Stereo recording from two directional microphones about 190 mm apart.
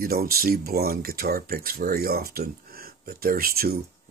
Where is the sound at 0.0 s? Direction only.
50° right (ahead or behind).